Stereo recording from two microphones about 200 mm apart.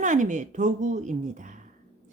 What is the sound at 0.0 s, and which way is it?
A woman's voice, 40° right (ahead or behind).